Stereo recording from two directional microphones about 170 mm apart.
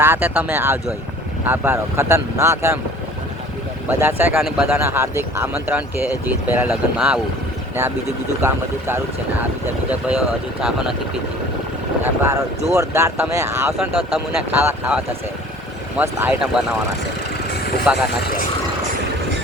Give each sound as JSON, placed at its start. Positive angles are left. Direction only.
{"t": 0.0, "sound": "speech", "side_deg": -10}
{"t": 3.8, "sound": "speech", "side_deg": -10}
{"t": 4.8, "sound": "speech", "side_deg": -15}
{"t": 8.4, "sound": "speech", "side_deg": -15}
{"t": 10.1, "sound": "speech", "side_deg": -5}
{"t": 12.0, "sound": "speech", "side_deg": -15}
{"t": 17.9, "sound": "speech", "side_deg": 65}